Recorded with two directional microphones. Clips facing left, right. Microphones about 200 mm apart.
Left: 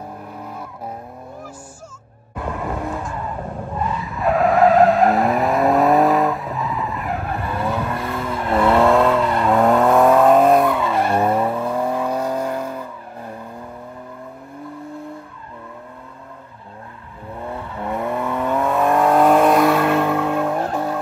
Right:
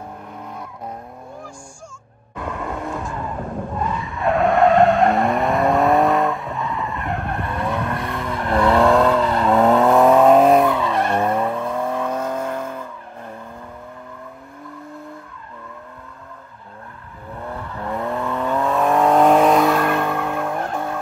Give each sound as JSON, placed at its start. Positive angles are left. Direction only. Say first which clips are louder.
{"t": 0.4, "sound": "vehicle", "louder": "even", "side_deg": 5}
{"t": 4.0, "sound": "vehicle", "louder": "left 1 dB", "side_deg": 0}
{"t": 17.7, "sound": "vehicle", "louder": "left 1 dB", "side_deg": 0}
{"t": 20.5, "sound": "vehicle", "louder": "left 3 dB", "side_deg": 30}